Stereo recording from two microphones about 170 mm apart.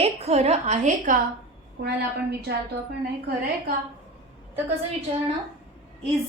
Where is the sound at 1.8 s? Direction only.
75° right (ahead or behind).